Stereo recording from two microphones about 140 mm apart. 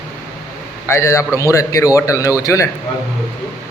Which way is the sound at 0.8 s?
20° left (ahead or behind).